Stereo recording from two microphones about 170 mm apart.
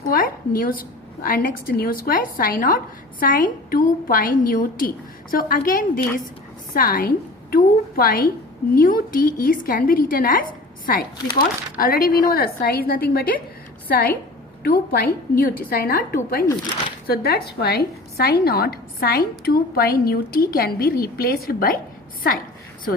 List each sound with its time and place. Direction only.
0.1 s a woman's voice: 55° left (ahead or behind)